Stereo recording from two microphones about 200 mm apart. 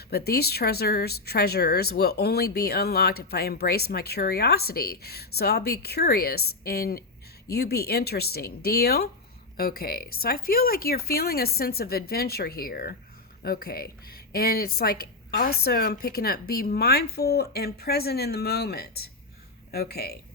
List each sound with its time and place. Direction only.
0.1 s speech: 50° left (ahead or behind)